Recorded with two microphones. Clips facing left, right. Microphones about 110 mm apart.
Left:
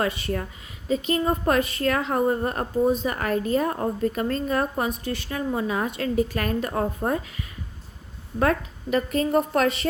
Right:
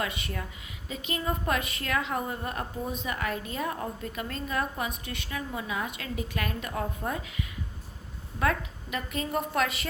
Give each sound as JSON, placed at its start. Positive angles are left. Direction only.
{"t": 0.0, "sound": "a woman's voice", "side_deg": 35}